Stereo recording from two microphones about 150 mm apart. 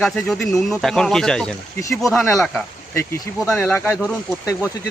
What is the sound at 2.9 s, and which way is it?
Speech, 20° left (ahead or behind).